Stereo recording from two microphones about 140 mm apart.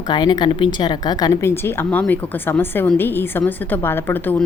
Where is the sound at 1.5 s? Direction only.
15° left (ahead or behind).